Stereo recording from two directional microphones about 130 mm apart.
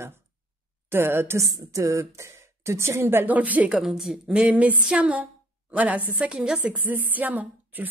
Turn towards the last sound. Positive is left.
turn(degrees=-15)  # may be behind; listen again after turning